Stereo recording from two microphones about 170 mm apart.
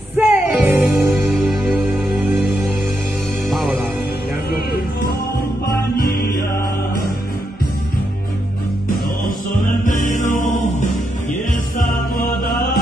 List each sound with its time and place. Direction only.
0.2 s music: 10° right (ahead or behind)
9.6 s music: 50° left (ahead or behind)
11.8 s mantra: 55° left (ahead or behind)